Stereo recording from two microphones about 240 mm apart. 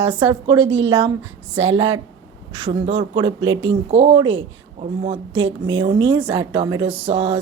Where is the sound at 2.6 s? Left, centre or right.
Right.